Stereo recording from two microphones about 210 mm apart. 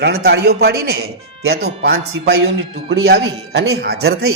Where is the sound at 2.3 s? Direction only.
75° right (ahead or behind).